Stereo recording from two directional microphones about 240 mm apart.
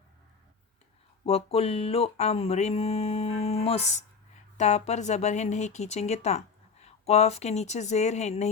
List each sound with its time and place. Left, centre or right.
1.2 s speech: left